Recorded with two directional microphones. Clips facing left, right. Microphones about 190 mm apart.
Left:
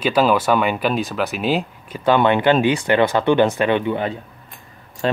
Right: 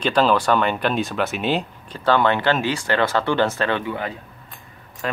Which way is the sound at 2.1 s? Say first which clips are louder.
Left 3 dB; 15° left (ahead or behind).